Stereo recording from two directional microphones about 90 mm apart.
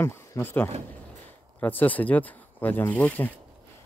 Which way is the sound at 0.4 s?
25° left (ahead or behind).